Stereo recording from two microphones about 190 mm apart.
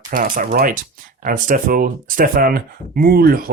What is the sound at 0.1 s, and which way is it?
Speech, 45° right (ahead or behind).